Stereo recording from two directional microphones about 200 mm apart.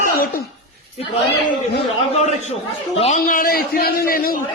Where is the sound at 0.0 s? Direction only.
50° left (ahead or behind).